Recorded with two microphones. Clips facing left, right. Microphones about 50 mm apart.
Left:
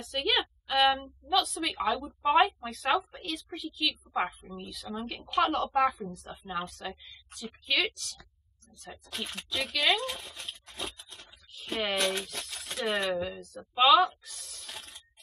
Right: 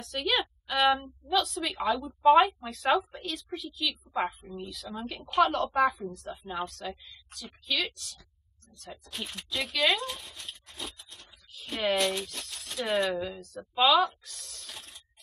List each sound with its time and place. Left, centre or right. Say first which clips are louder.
0.0 s a woman's voice: even; centre
8.7 s a woman's voice: even; centre
10.7 s scrape: left 3 dB; left
11.5 s speech: right 3 dB; centre
12.2 s speech: even; left
12.7 s a woman's voice: right 1 dB; centre